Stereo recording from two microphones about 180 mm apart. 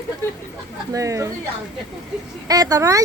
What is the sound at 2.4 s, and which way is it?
Speech, 20° right (ahead or behind).